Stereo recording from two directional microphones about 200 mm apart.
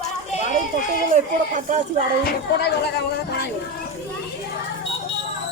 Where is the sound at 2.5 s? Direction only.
55° left (ahead or behind).